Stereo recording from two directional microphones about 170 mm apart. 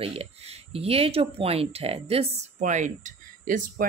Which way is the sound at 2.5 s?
45° right (ahead or behind).